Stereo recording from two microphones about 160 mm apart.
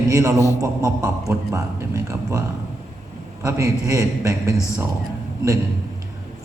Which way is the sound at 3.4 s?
20° right (ahead or behind).